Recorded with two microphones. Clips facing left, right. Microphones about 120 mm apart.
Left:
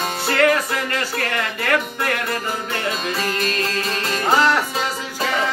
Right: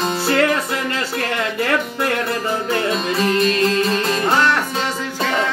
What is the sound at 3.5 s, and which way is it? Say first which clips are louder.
Music: right 6 dB; 35° right (ahead or behind).